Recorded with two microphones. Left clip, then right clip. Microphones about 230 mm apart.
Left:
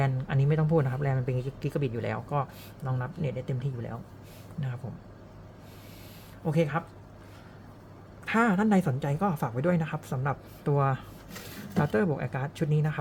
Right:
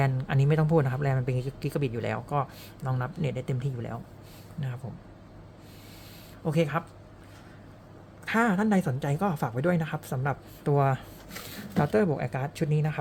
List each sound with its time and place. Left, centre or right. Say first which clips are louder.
0.0 s speech: right 2 dB; centre
6.4 s speech: right 1 dB; centre
8.2 s speech: even; centre